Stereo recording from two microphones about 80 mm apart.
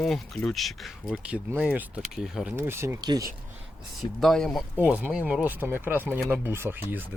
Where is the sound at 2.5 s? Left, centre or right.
Right.